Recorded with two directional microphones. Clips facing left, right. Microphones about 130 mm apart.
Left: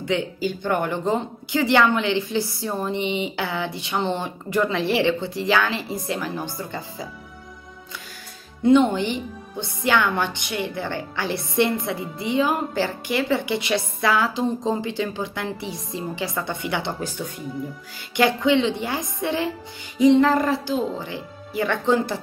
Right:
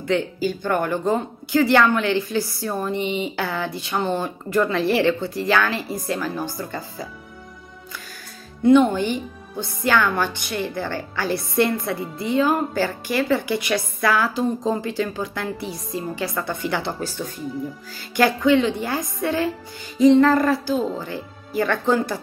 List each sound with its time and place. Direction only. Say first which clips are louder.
0.0 s a woman's voice: right 2 dB; 20° left (ahead or behind)
8.6 s a woman's voice: right 2 dB; 20° left (ahead or behind)
18.1 s a woman's voice: right 2 dB; 20° left (ahead or behind)
20.0 s music: right 2 dB; 15° left (ahead or behind)
21.5 s a woman's voice: right 1 dB; 20° left (ahead or behind)